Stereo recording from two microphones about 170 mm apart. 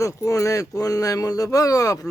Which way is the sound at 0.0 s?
20° left (ahead or behind).